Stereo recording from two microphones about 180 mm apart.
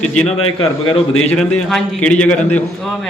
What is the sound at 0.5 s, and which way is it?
Speech, 30° left (ahead or behind).